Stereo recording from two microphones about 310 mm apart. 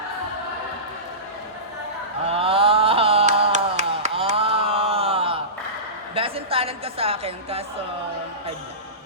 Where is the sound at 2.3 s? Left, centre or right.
Centre.